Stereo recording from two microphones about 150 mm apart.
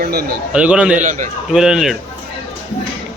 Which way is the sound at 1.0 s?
55° right (ahead or behind).